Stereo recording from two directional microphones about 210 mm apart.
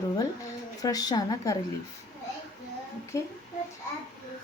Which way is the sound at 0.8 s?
15° left (ahead or behind).